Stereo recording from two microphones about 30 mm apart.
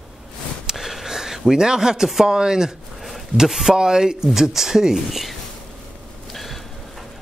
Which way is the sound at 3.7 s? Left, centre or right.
Right.